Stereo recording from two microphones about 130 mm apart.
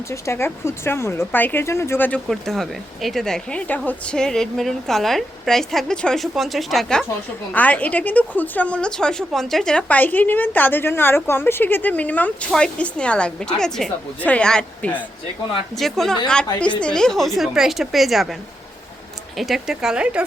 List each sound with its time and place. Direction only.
0.1 s speech: 20° left (ahead or behind)
2.2 s speech: centre (ahead or behind)
19.4 s speech: centre (ahead or behind)